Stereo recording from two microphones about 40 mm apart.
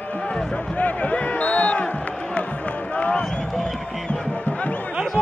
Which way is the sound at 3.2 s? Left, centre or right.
Centre.